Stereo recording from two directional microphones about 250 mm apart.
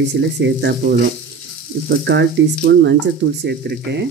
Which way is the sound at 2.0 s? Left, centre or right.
Right.